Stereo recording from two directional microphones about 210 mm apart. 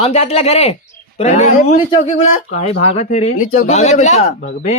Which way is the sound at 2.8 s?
35° left (ahead or behind).